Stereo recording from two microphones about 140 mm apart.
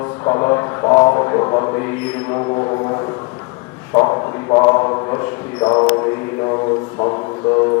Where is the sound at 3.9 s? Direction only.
30° left (ahead or behind).